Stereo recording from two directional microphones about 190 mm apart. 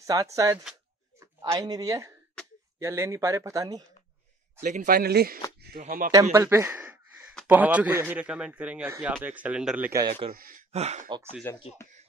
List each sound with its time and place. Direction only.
0.0 s speech: 15° right (ahead or behind)
4.6 s speech: 45° right (ahead or behind)
6.3 s speech: 15° right (ahead or behind)
10.3 s speech: 50° right (ahead or behind)
10.7 s speech: 35° right (ahead or behind)
11.5 s speech: 15° left (ahead or behind)